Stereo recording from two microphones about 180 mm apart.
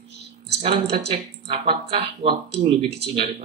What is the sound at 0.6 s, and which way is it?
Speech, 35° right (ahead or behind).